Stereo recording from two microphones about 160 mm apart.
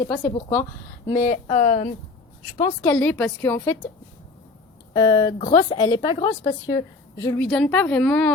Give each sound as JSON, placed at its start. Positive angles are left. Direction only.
{"t": 0.0, "sound": "speech", "side_deg": 20}
{"t": 1.2, "sound": "speech", "side_deg": 45}
{"t": 2.8, "sound": "speech", "side_deg": 10}
{"t": 4.9, "sound": "a woman's voice", "side_deg": 25}
{"t": 7.2, "sound": "speech", "side_deg": 15}